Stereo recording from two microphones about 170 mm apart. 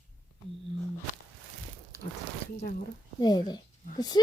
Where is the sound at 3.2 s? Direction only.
25° left (ahead or behind).